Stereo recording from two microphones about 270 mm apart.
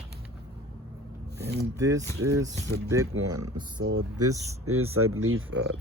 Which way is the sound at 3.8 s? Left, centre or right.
Right.